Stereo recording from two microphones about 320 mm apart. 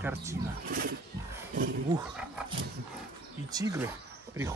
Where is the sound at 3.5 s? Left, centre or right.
Centre.